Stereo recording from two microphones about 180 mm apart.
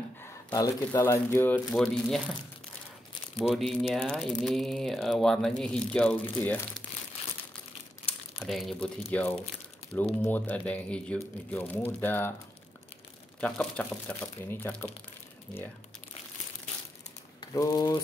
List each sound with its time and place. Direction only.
0.2 s speech: 15° left (ahead or behind)
3.4 s speech: centre (ahead or behind)
8.4 s speech: centre (ahead or behind)
13.4 s speech: 5° left (ahead or behind)
17.6 s speech: 20° left (ahead or behind)